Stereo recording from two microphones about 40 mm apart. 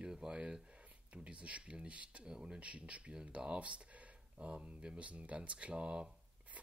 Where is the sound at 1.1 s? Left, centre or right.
Right.